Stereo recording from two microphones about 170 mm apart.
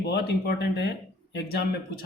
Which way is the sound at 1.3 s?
65° left (ahead or behind).